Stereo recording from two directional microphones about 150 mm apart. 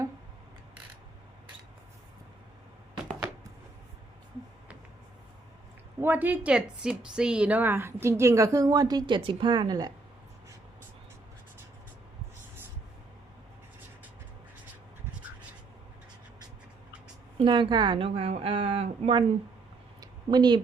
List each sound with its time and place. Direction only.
6.0 s a woman's voice: 10° right (ahead or behind)
17.3 s a woman's voice: 30° right (ahead or behind)
20.0 s a sound: 30° right (ahead or behind)